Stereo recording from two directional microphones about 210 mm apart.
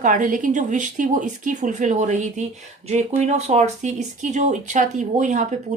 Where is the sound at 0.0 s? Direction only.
40° right (ahead or behind).